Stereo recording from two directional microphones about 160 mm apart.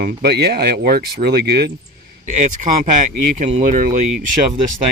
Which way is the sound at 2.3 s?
50° right (ahead or behind).